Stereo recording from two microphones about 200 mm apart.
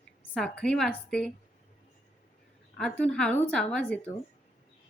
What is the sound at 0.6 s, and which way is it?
Speech, 5° left (ahead or behind).